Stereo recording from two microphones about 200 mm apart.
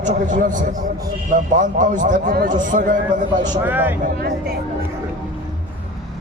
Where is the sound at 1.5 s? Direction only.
40° right (ahead or behind).